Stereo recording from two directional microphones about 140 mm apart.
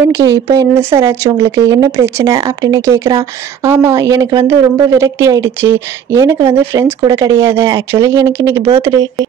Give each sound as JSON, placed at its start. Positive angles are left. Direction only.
{"t": 0.1, "sound": "a woman's voice", "side_deg": -20}